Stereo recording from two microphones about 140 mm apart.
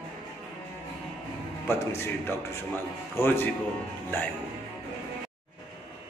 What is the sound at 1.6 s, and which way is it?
A man's voice, 15° left (ahead or behind).